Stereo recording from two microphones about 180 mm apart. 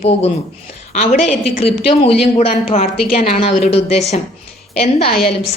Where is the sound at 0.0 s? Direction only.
35° left (ahead or behind).